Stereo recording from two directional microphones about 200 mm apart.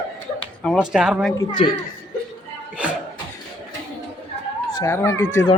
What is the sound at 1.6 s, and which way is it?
Speech, 30° left (ahead or behind).